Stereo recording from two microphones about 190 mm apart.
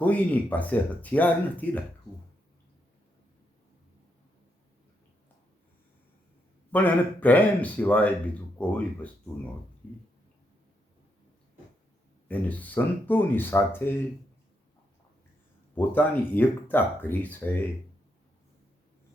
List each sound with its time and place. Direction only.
0.0 s speech: 10° left (ahead or behind)
6.7 s speech: 10° left (ahead or behind)
12.3 s speech: 10° left (ahead or behind)
15.7 s speech: 10° left (ahead or behind)